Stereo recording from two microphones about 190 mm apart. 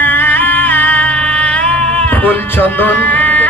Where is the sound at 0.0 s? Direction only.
10° left (ahead or behind).